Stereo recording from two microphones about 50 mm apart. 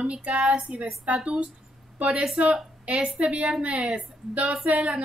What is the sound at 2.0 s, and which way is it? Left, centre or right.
A woman's voice, right.